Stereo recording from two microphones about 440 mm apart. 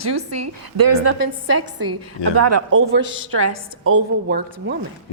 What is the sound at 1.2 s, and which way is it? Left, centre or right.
A woman's voice, right.